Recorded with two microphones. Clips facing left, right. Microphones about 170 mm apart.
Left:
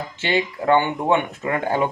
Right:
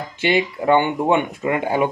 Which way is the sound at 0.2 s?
15° right (ahead or behind).